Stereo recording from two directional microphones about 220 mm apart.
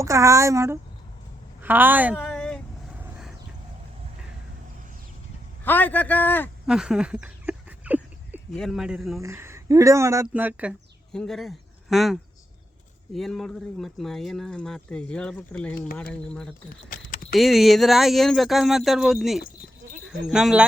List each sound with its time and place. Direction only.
0.0 s speech: 15° right (ahead or behind)
2.1 s a sound: 5° left (ahead or behind)
5.6 s a man's voice: 10° left (ahead or behind)
6.7 s a sound: 5° right (ahead or behind)
9.2 s speech: 10° right (ahead or behind); by 16.6 s 5° left (ahead or behind)
16.9 s keys jangling: 35° left (ahead or behind)
17.3 s speech: centre (ahead or behind)